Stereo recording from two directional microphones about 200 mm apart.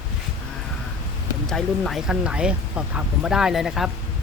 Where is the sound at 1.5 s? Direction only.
Centre (ahead or behind).